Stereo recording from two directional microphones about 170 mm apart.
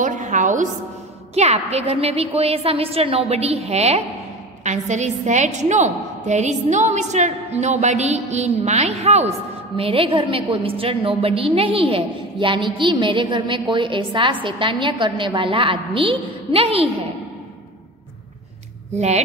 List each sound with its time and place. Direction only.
0.0 s a woman's voice: 45° right (ahead or behind)
18.9 s a woman's voice: 40° right (ahead or behind)